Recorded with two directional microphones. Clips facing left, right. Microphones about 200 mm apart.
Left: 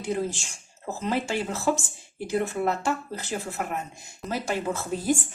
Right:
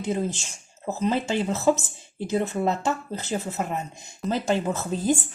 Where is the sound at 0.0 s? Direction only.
20° right (ahead or behind).